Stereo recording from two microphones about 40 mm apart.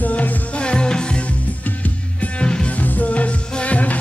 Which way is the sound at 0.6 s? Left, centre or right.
Left.